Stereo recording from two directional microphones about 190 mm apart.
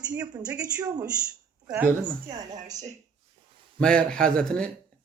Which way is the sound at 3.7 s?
5° left (ahead or behind).